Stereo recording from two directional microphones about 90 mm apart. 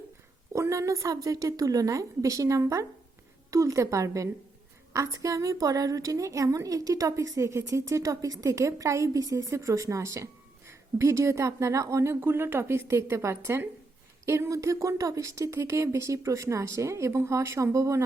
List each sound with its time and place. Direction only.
0.5 s a woman's voice: 35° right (ahead or behind)